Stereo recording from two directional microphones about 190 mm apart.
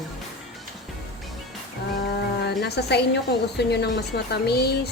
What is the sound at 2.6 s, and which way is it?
A woman's voice, 60° left (ahead or behind).